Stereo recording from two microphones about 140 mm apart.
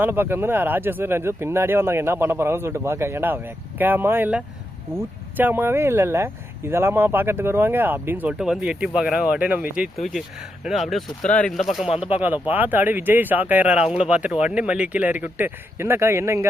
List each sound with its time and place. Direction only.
0.0 s speech: 15° right (ahead or behind); by 11.6 s 5° left (ahead or behind)
12.2 s speech: 10° right (ahead or behind)